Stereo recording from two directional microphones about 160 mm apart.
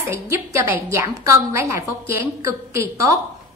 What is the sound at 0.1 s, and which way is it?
A woman's voice, 15° right (ahead or behind).